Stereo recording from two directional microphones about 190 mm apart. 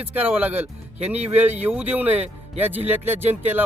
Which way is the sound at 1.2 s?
35° right (ahead or behind).